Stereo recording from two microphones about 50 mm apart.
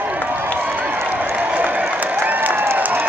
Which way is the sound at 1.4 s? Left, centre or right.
Right.